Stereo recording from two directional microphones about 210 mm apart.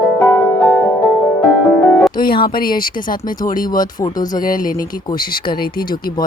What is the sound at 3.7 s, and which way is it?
Speech, 20° left (ahead or behind).